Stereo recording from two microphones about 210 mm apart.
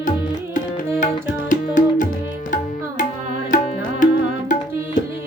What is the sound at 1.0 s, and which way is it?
Music, 35° left (ahead or behind).